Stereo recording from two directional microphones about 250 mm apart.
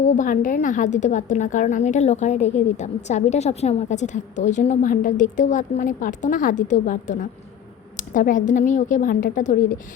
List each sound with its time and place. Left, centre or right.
0.0 s a woman's voice: left
7.9 s a sound: left
8.4 s a woman's voice: left